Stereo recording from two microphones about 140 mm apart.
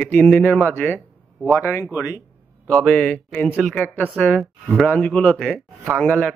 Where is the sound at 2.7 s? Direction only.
10° left (ahead or behind).